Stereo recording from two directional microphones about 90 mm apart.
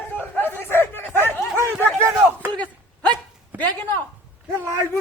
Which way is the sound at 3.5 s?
20° right (ahead or behind).